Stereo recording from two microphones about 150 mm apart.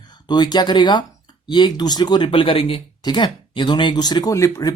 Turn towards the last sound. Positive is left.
turn(degrees=25)  # may be behind; listen again after turning